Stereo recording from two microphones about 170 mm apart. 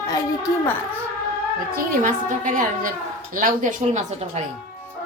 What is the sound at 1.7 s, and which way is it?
A woman's voice, 60° right (ahead or behind).